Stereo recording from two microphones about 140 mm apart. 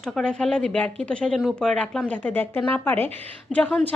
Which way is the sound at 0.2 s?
5° left (ahead or behind).